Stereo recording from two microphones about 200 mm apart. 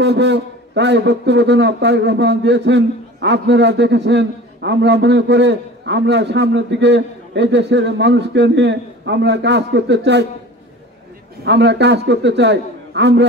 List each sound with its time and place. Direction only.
0.0 s a man's voice: 60° right (ahead or behind)
11.4 s a man's voice: 60° right (ahead or behind)